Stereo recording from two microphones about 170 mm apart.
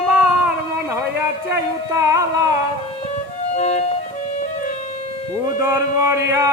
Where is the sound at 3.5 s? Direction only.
40° left (ahead or behind).